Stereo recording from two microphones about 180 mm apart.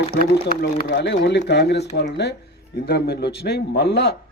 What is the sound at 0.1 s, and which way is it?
Speech, 55° left (ahead or behind).